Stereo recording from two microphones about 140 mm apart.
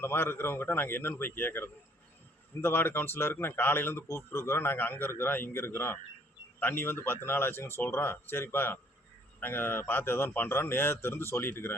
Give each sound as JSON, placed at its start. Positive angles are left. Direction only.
{"t": 0.0, "sound": "speech", "side_deg": 15}